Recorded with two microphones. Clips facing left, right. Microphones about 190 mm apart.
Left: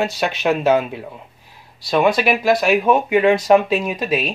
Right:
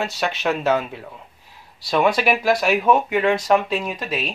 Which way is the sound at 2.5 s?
10° left (ahead or behind).